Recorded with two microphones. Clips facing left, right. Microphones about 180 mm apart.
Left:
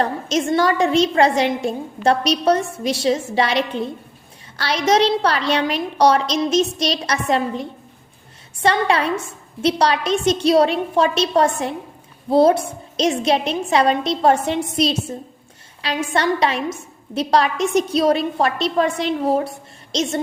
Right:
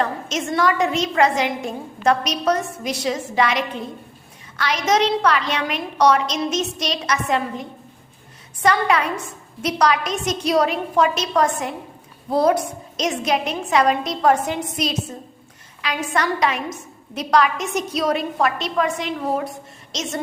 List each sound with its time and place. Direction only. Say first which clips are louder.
0.0 s a woman's voice: left 4 dB; 35° left (ahead or behind)